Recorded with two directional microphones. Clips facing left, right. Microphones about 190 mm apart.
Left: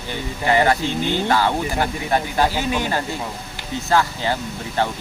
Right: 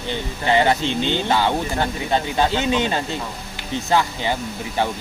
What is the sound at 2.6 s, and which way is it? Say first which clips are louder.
Speech: right 2 dB; 20° right (ahead or behind).